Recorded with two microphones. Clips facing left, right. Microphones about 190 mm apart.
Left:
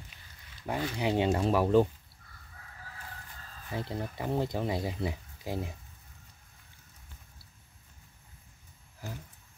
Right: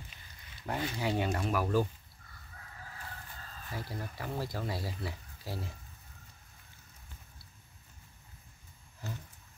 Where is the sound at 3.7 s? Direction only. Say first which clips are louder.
Left 6 dB; 25° left (ahead or behind).